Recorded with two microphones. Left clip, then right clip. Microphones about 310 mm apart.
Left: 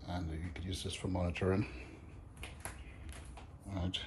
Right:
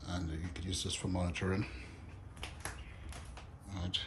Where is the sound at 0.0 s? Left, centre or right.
Centre.